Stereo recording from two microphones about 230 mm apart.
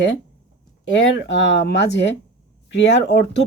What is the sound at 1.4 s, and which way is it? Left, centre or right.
Speech, left.